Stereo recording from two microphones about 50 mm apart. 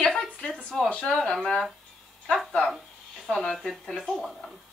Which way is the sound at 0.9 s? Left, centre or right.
Left.